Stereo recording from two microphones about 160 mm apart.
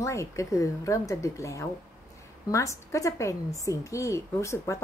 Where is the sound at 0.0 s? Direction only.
20° left (ahead or behind).